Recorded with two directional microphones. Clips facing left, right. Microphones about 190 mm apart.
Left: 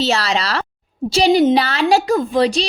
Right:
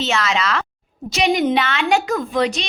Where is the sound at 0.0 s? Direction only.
35° left (ahead or behind).